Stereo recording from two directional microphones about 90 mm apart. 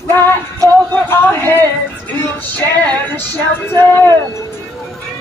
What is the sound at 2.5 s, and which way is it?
Music, 20° left (ahead or behind).